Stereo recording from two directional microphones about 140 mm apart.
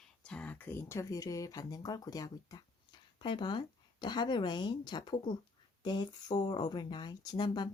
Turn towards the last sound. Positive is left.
turn(degrees=30)  # may be behind; listen again after turning